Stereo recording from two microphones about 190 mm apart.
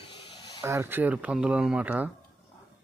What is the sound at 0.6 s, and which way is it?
Speech, 15° right (ahead or behind).